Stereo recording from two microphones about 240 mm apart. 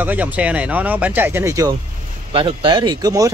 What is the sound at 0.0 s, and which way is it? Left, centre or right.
Speech, centre.